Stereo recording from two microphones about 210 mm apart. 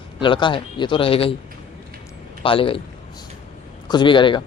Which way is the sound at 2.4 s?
25° left (ahead or behind).